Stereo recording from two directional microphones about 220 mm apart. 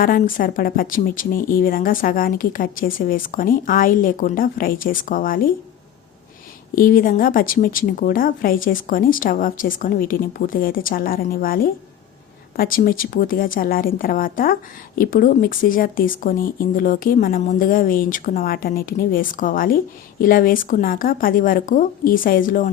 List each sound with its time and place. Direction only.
0.0 s a woman's voice: 40° left (ahead or behind)
6.7 s a woman's voice: 40° left (ahead or behind)